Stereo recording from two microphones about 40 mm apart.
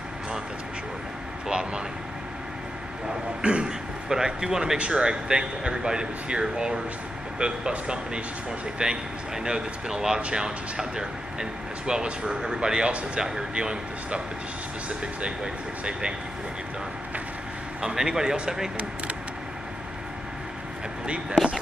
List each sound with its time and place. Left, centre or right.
1.5 s speech: right
3.4 s speech: right
4.1 s speech: centre
15.2 s speech: right
17.8 s speech: centre
21.0 s speech: right